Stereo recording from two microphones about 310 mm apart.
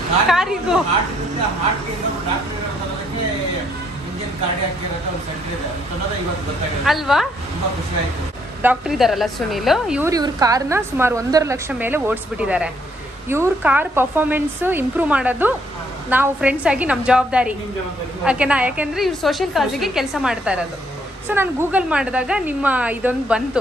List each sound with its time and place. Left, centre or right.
0.3 s a woman's voice: centre
6.8 s a woman's voice: centre
8.6 s a woman's voice: centre